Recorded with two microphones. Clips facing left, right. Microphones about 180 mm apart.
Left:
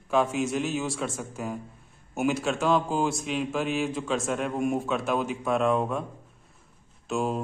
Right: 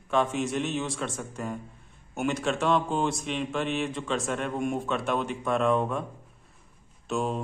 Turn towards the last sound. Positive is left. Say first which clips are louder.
# left 1 dB
turn(degrees=0)  # may be behind; listen again after turning